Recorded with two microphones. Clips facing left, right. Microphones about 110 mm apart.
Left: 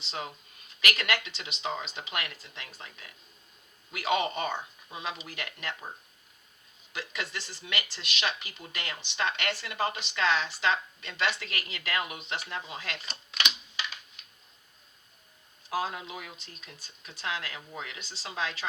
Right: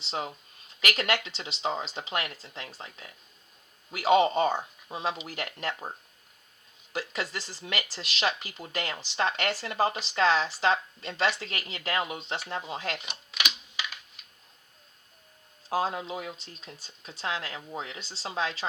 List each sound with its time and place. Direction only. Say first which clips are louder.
0.0 s speech: right 4 dB; 30° right (ahead or behind)
6.9 s speech: right 4 dB; 35° right (ahead or behind)
13.3 s typewriter: even; 5° right (ahead or behind)
15.7 s speech: right 4 dB; 30° right (ahead or behind)